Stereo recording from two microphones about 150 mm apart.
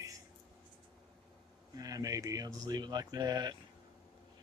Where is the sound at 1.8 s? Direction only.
25° right (ahead or behind).